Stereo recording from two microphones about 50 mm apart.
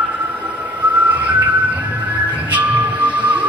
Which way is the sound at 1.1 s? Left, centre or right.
Right.